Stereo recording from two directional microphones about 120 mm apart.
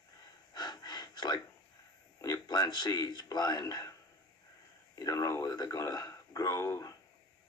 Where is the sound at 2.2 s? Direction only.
30° left (ahead or behind).